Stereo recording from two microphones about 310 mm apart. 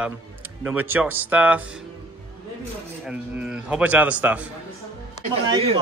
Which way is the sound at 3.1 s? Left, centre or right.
Centre.